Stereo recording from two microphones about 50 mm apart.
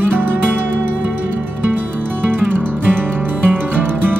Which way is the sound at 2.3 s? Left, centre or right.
Right.